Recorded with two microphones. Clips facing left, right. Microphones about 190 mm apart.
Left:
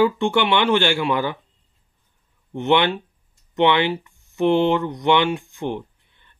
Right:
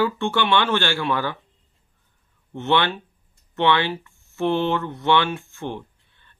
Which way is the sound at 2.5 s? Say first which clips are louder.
Left 3 dB; 15° left (ahead or behind).